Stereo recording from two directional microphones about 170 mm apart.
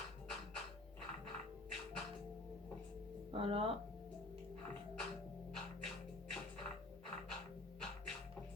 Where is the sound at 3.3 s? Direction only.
35° right (ahead or behind).